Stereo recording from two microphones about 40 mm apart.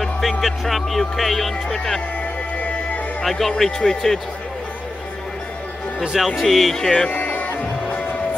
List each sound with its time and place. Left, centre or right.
0.4 s speech: centre
3.3 s a man's voice: centre
5.9 s speech: centre
7.1 s music: left